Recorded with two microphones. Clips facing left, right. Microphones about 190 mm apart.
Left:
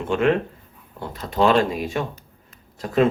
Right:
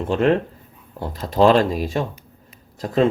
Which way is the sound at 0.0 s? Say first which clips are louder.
Right 2 dB; 35° right (ahead or behind).